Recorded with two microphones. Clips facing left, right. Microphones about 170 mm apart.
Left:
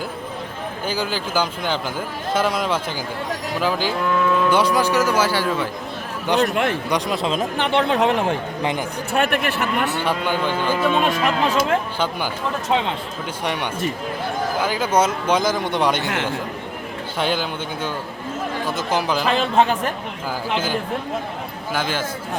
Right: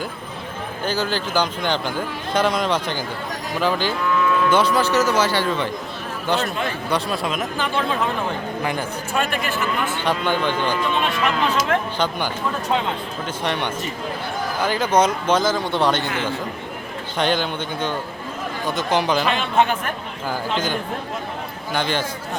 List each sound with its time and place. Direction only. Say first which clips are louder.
0.9 s a man's voice: right 2 dB; 10° left (ahead or behind)
6.4 s speech: left 5 dB; 70° left (ahead or behind)
6.9 s speech: left 2 dB; 20° left (ahead or behind)
7.5 s speech: left 4 dB; 70° left (ahead or behind)
9.1 s speech: left 3 dB; 60° left (ahead or behind)
10.0 s a man's voice: even; 10° left (ahead or behind)
10.9 s speech: left 2 dB; 45° left (ahead or behind)
11.9 s a man's voice: right 1 dB; 5° left (ahead or behind)
13.4 s a man's voice: left 1 dB; 10° left (ahead or behind)
16.0 s speech: left 1 dB; 75° left (ahead or behind)
17.2 s a man's voice: right 2 dB; 5° left (ahead or behind)
19.3 s speech: left 2 dB; 35° left (ahead or behind)
21.7 s a man's voice: right 1 dB; 5° left (ahead or behind)